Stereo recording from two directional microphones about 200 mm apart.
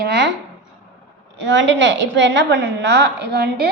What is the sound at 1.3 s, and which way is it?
A woman's voice, 70° right (ahead or behind).